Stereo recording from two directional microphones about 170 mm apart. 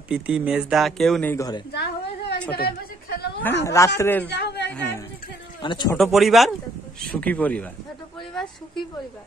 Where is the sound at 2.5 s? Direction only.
70° left (ahead or behind).